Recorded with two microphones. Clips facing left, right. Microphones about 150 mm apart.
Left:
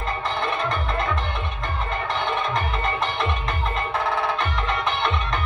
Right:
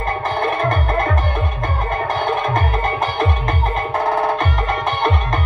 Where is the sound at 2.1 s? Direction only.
45° right (ahead or behind).